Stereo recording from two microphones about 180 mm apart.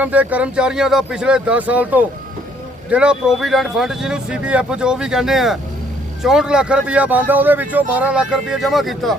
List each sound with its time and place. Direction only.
0.0 s speech: 10° right (ahead or behind)